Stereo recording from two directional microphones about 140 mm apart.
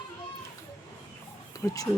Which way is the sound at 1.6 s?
25° left (ahead or behind).